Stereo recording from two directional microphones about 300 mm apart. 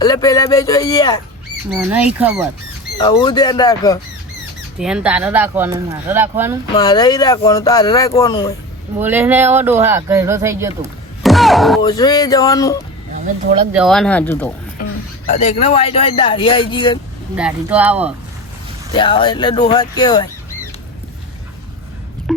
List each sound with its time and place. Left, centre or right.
0.0 s speech: centre
2.1 s speech: centre
3.0 s speech: centre
4.8 s speech: centre
6.7 s speech: centre
9.0 s speech: centre
11.8 s speech: centre
13.2 s speech: right
13.7 s speech: centre
15.3 s speech: left
17.3 s speech: centre
18.9 s speech: centre
22.3 s a sound: centre